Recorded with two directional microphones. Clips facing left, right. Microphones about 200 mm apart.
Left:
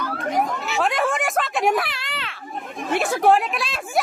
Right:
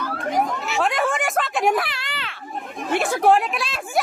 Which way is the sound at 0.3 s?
Centre (ahead or behind).